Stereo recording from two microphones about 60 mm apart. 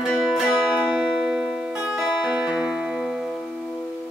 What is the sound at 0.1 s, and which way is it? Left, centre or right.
Music, centre.